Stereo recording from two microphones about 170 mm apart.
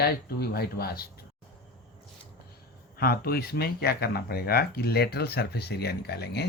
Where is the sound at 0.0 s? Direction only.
65° left (ahead or behind).